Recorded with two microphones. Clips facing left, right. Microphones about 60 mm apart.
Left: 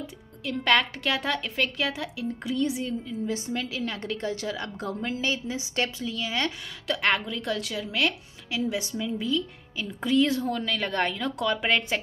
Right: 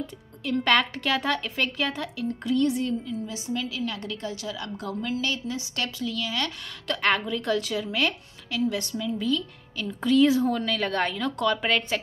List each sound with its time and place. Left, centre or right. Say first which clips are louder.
0.0 s speech: right 2 dB; centre
3.3 s a woman's voice: left 1 dB; left
6.9 s speech: right 1 dB; centre
8.5 s a woman's voice: right 1 dB; centre
10.2 s speech: right 5 dB; centre